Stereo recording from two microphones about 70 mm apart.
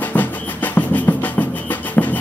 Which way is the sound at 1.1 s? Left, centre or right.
Left.